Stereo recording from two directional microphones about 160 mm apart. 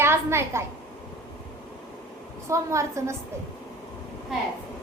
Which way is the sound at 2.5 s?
20° right (ahead or behind).